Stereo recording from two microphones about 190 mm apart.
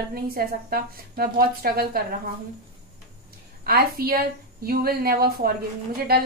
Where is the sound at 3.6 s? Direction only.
55° right (ahead or behind).